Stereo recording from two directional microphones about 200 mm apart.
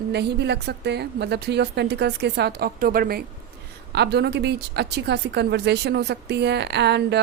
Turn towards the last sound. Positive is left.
turn(degrees=-55)  # may be behind; listen again after turning